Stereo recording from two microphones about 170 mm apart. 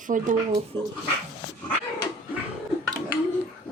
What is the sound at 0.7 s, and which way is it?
Speech, 10° left (ahead or behind).